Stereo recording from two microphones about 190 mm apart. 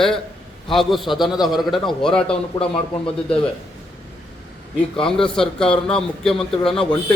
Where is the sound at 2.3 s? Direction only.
30° left (ahead or behind).